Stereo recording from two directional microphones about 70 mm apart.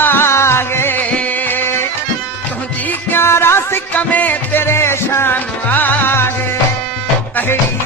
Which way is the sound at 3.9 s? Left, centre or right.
Left.